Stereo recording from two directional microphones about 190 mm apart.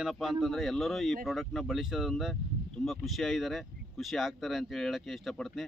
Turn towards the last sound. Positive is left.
turn(degrees=0)  # may be behind; listen again after turning